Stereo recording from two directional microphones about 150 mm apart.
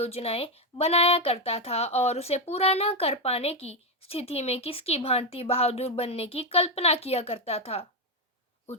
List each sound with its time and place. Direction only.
0.0 s speech: 40° left (ahead or behind)